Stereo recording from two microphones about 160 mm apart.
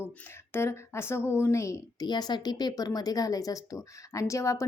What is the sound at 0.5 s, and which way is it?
A woman's voice, 15° left (ahead or behind).